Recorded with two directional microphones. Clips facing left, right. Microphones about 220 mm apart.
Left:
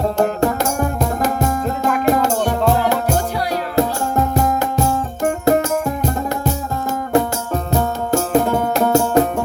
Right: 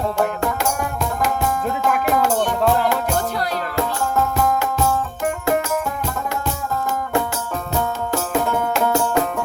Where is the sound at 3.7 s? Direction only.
35° left (ahead or behind).